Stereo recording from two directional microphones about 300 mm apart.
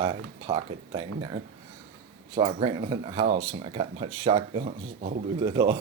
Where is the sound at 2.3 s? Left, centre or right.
Centre.